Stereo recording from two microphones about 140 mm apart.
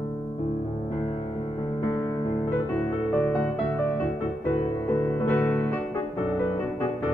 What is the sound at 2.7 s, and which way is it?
Music, 10° left (ahead or behind).